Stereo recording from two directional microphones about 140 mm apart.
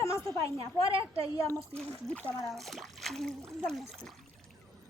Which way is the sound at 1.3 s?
20° left (ahead or behind).